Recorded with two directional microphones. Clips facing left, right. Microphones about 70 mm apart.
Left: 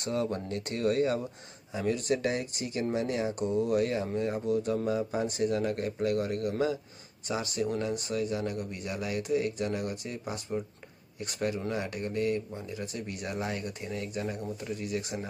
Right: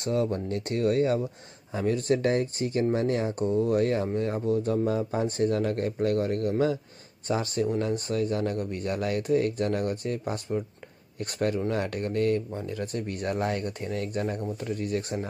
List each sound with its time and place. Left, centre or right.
0.5 s speech: right